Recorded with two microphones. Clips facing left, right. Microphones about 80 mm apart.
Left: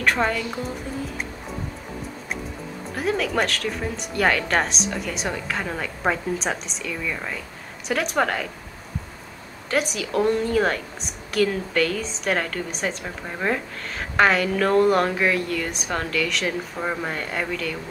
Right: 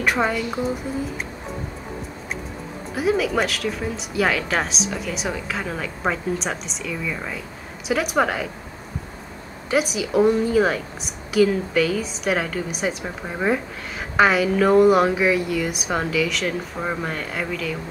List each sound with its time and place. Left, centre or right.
0.0 s a woman's voice: centre
2.9 s a woman's voice: centre
9.7 s a woman's voice: centre